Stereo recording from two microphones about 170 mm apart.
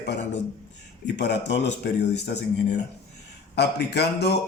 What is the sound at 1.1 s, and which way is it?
Speech, 90° left.